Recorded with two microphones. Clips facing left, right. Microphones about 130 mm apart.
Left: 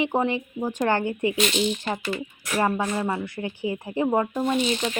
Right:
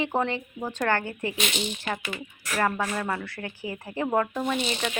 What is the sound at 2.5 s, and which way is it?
Speech, 15° left (ahead or behind).